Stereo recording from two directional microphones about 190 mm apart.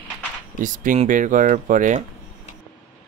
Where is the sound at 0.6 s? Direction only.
40° right (ahead or behind).